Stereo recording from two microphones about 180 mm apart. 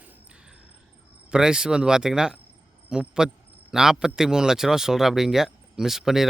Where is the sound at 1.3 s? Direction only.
5° right (ahead or behind).